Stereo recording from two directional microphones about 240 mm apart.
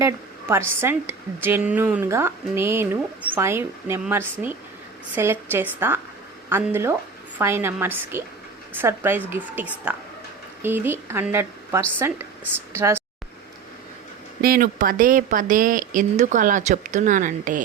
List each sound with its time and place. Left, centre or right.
0.0 s a woman's voice: centre
14.4 s speech: right